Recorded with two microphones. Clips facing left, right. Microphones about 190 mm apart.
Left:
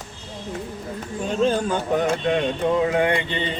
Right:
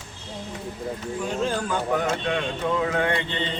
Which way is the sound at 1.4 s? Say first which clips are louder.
Left 7 dB; 25° left (ahead or behind).